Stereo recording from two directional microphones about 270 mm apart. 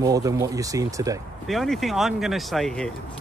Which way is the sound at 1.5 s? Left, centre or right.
Centre.